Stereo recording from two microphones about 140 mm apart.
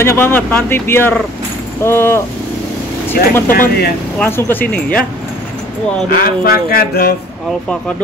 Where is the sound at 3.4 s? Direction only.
90° left.